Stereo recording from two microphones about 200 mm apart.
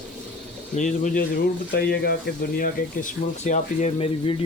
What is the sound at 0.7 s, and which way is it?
Speech, 40° left (ahead or behind).